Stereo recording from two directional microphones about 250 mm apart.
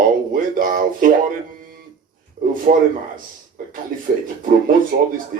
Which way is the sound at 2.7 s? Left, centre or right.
Right.